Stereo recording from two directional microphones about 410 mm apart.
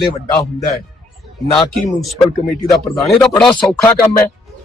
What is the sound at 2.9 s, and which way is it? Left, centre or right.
Speech, centre.